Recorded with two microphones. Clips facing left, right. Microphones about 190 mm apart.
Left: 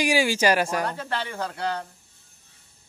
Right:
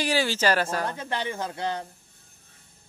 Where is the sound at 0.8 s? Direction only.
20° right (ahead or behind).